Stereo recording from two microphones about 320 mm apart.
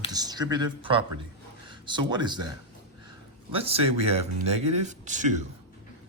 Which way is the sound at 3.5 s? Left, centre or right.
Centre.